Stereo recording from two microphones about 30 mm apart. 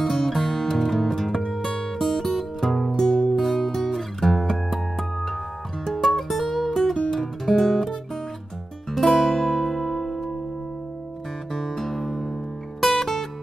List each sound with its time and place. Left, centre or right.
0.1 s music: centre
3.0 s music: left
3.4 s music: centre
6.7 s music: centre
8.9 s music: centre
11.5 s music: centre